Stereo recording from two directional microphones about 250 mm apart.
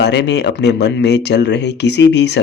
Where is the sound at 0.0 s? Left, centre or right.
Left.